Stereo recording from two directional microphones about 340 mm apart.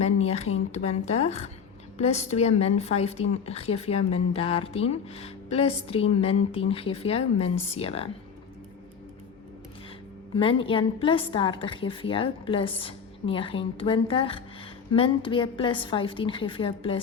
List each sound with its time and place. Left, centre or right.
0.0 s a woman's voice: centre
10.3 s a woman's voice: centre